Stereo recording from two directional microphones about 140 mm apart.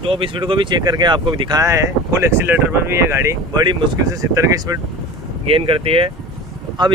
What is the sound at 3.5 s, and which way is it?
Speech, 30° right (ahead or behind).